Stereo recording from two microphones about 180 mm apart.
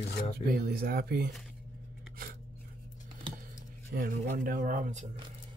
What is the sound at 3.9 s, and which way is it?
Speech, 50° right (ahead or behind).